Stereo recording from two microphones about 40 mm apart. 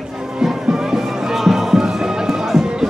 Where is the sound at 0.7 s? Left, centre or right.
Centre.